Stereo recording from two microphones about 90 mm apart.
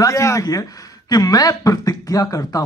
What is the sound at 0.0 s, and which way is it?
A man's voice, 35° left (ahead or behind).